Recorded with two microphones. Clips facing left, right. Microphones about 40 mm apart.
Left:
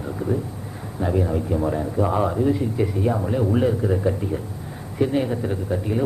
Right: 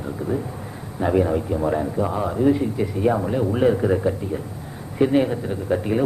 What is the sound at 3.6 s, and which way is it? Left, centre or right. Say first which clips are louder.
Speech: right 3 dB; right.